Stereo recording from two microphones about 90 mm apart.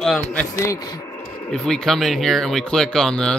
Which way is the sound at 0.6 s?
40° left (ahead or behind).